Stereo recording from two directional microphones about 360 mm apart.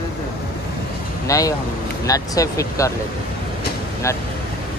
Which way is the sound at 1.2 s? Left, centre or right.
Centre.